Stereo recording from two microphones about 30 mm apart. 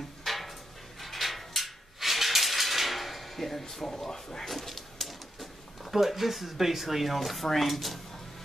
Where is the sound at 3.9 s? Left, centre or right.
Centre.